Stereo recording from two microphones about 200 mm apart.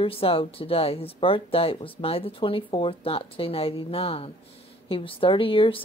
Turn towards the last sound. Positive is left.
turn(degrees=25)  # may be behind; listen again after turning